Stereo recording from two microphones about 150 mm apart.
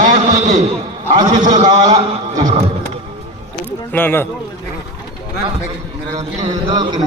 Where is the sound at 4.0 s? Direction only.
15° left (ahead or behind).